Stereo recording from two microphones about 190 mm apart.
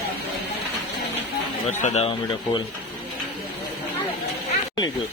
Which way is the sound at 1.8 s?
35° left (ahead or behind).